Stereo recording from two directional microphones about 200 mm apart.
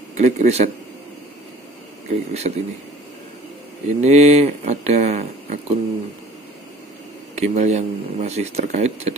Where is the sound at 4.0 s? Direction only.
35° right (ahead or behind).